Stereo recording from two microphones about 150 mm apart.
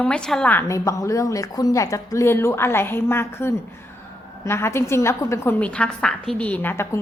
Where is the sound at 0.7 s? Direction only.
20° left (ahead or behind).